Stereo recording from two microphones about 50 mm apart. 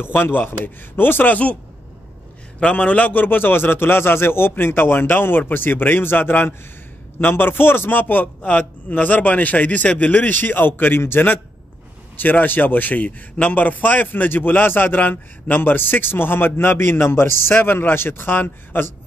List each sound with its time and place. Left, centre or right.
0.0 s a man's voice: left
2.7 s a man's voice: left
17.6 s a man's voice: left